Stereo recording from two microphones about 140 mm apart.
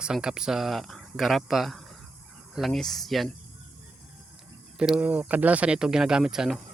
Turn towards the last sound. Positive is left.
turn(degrees=-5)  # may be behind; listen again after turning